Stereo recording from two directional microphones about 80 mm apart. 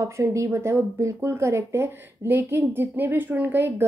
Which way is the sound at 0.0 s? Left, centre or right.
Right.